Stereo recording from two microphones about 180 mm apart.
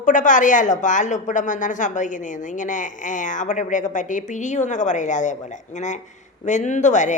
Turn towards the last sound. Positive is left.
turn(degrees=40)  # may be behind; listen again after turning